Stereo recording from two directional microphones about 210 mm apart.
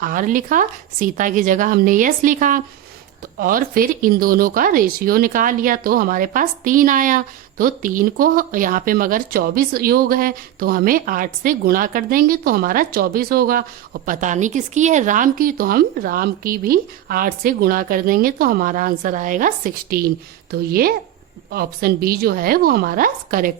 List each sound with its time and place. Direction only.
0.0 s a woman's voice: 40° right (ahead or behind)